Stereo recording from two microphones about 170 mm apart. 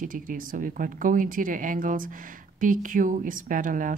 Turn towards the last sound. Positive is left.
turn(degrees=-50)  # may be behind; listen again after turning